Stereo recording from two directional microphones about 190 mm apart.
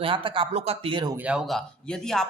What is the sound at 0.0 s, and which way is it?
Speech, 25° right (ahead or behind).